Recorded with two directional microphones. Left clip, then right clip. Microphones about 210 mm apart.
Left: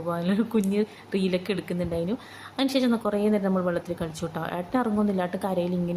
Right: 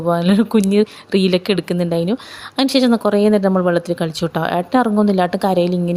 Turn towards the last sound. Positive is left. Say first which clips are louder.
# right 11 dB
turn(degrees=-45)  # may be behind; listen again after turning